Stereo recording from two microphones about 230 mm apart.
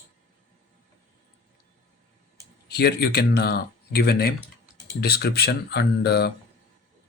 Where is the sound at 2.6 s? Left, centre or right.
Left.